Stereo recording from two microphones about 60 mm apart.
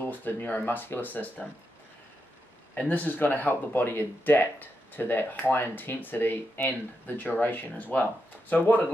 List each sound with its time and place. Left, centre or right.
0.0 s speech: left
2.9 s speech: left